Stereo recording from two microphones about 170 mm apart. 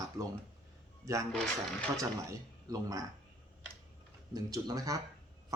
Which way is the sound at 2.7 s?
20° right (ahead or behind).